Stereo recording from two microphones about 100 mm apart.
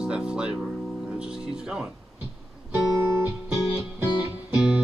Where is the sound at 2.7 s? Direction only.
20° right (ahead or behind).